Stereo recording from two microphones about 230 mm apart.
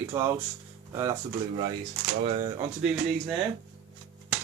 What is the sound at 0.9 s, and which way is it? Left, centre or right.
Speech, centre.